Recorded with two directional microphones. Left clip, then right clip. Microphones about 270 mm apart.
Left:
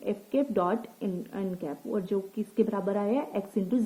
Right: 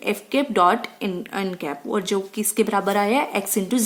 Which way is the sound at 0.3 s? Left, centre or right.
Centre.